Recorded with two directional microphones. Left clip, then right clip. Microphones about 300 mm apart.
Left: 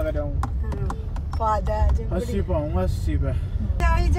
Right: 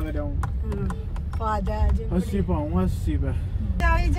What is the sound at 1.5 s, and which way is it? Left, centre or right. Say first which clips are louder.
Speech: left 2 dB; left.